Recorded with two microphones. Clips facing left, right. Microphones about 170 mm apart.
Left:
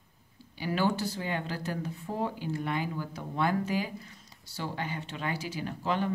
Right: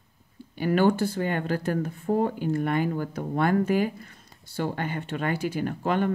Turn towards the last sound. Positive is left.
turn(degrees=-55)  # may be behind; listen again after turning